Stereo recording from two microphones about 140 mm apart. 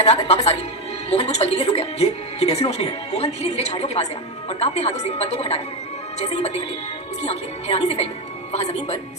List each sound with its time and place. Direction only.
0.0 s a woman's voice: 50° left (ahead or behind)